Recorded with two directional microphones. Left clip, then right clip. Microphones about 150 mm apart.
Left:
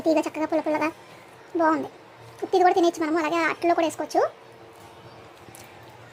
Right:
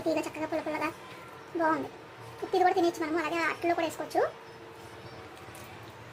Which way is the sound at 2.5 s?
40° left (ahead or behind).